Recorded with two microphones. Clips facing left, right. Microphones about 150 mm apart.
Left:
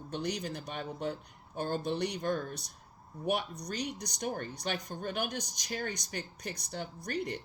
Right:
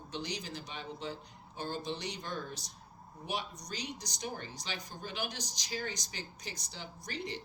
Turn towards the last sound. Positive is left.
turn(degrees=60)  # may be behind; listen again after turning